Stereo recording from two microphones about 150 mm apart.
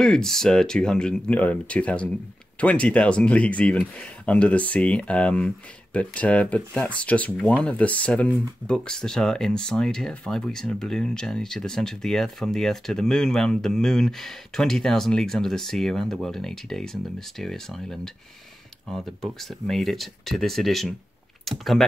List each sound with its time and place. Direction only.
0.0 s speech: 5° left (ahead or behind)